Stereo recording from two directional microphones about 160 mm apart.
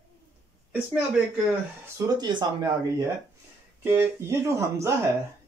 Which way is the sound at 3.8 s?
15° right (ahead or behind).